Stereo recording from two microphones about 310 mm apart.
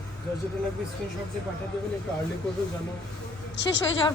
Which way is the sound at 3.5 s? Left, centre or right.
Left.